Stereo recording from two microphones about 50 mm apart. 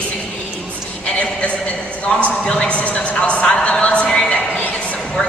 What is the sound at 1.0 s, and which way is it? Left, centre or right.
Speech, left.